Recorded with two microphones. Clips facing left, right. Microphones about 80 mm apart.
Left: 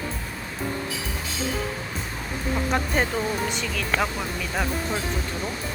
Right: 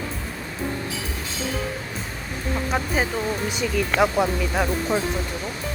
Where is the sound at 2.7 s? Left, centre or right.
Centre.